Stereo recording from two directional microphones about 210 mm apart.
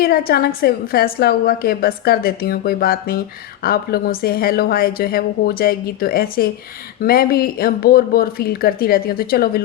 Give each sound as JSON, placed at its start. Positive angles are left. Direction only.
{"t": 0.0, "sound": "a woman's voice", "side_deg": 45}